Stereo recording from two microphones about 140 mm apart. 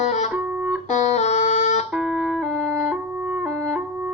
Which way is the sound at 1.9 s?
5° right (ahead or behind).